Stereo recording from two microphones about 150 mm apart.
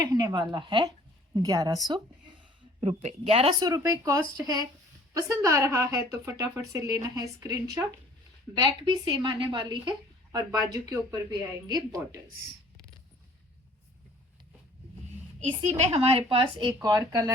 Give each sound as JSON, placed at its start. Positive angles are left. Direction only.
{"t": 0.0, "sound": "speech", "side_deg": -25}
{"t": 2.8, "sound": "a woman's voice", "side_deg": -45}
{"t": 3.6, "sound": "speech", "side_deg": -25}
{"t": 8.5, "sound": "speech", "side_deg": -30}
{"t": 15.4, "sound": "a woman's voice", "side_deg": -50}
{"t": 16.7, "sound": "speech", "side_deg": -20}